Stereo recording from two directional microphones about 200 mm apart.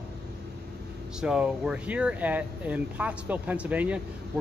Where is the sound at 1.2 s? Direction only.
5° right (ahead or behind).